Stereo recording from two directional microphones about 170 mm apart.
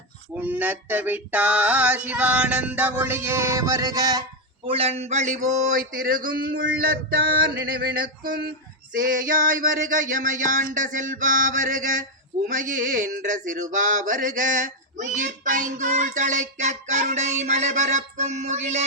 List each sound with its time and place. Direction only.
0.3 s a sound: 10° right (ahead or behind)
4.6 s male singing: 35° right (ahead or behind); by 6.3 s 55° right (ahead or behind)
6.6 s male singing: 70° right (ahead or behind); by 18.9 s 40° right (ahead or behind)